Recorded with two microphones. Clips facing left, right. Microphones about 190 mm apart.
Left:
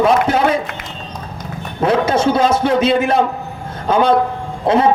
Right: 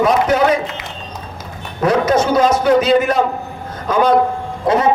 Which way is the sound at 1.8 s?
30° left (ahead or behind).